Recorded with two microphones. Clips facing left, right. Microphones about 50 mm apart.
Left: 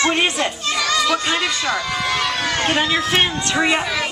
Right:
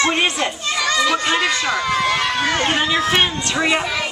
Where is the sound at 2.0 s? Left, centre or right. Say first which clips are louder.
Right 2 dB; centre.